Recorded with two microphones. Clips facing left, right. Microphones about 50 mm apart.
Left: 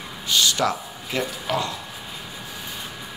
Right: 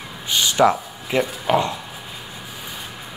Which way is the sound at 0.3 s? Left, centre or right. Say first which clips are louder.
Right 5 dB; right.